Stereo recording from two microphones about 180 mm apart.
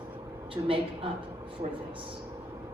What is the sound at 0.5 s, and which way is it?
Speech, 30° right (ahead or behind).